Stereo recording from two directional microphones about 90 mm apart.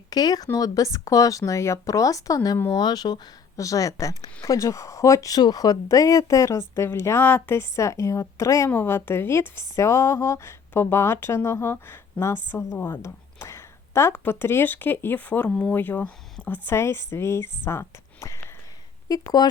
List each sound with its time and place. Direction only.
0.1 s a woman's voice: 45° left (ahead or behind)
3.6 s a woman's voice: 40° left (ahead or behind)
19.0 s speech: 45° left (ahead or behind)